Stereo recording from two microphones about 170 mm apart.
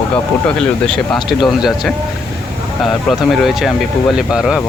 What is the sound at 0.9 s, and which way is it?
Speech, centre (ahead or behind).